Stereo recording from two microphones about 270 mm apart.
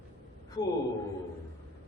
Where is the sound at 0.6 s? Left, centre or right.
Centre.